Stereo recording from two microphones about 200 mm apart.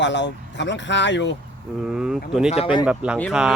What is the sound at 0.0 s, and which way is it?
Speech, 60° left (ahead or behind).